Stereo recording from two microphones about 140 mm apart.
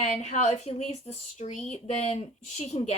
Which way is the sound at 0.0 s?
55° left (ahead or behind).